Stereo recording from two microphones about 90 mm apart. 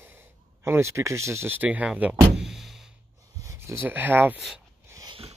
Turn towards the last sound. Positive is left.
turn(degrees=-20)  # may be behind; listen again after turning